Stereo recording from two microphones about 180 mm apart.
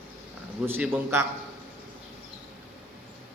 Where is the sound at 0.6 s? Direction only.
10° right (ahead or behind).